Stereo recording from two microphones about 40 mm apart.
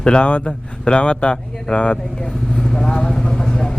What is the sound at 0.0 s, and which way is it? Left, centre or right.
Speech, left.